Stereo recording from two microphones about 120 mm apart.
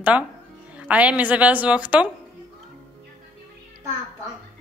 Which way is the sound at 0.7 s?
10° right (ahead or behind).